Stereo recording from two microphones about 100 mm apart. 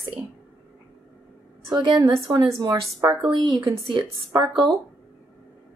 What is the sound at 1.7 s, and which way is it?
Speech, 50° right (ahead or behind).